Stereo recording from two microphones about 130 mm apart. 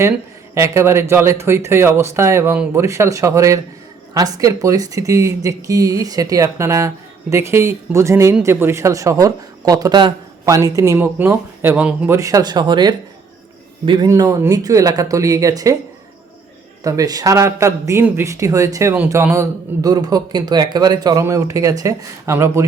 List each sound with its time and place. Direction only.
0.5 s speech: 20° right (ahead or behind)
12.1 s speech: 25° right (ahead or behind)
14.1 s speech: 25° right (ahead or behind)
16.8 s speech: 25° right (ahead or behind)